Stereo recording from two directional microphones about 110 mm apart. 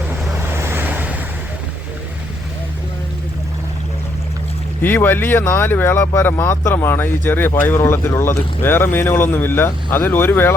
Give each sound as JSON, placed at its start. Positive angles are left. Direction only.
{"t": 0.5, "sound": "waves", "side_deg": -20}
{"t": 4.8, "sound": "speech", "side_deg": 20}